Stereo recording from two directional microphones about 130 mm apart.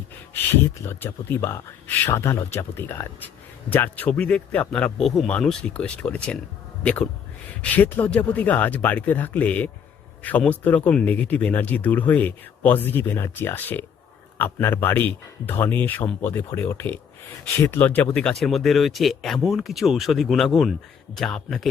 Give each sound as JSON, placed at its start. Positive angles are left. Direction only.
{"t": 0.5, "sound": "speech", "side_deg": 15}